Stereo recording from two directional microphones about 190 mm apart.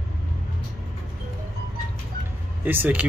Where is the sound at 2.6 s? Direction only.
10° right (ahead or behind).